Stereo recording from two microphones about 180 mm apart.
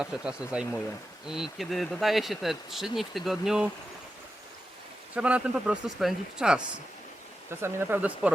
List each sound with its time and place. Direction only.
0.0 s speech: 5° right (ahead or behind)
5.1 s speech: 5° right (ahead or behind)
7.6 s speech: 10° right (ahead or behind)